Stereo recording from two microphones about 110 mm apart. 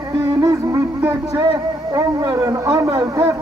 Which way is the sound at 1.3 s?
30° right (ahead or behind).